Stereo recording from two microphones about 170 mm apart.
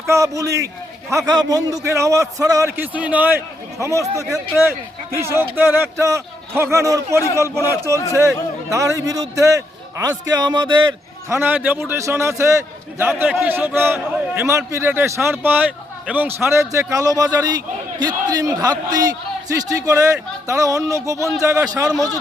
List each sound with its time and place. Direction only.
0.1 s a man's voice: 20° right (ahead or behind)
5.1 s a man's voice: 15° right (ahead or behind)
11.3 s a man's voice: 10° right (ahead or behind)